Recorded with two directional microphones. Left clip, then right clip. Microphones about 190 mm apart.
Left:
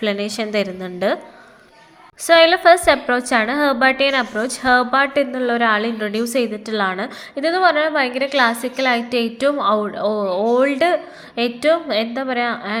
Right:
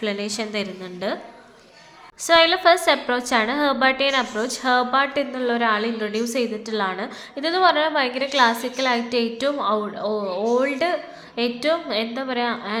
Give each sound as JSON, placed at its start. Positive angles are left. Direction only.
{"t": 0.0, "sound": "a woman's voice", "side_deg": 20}
{"t": 2.2, "sound": "a woman's voice", "side_deg": 15}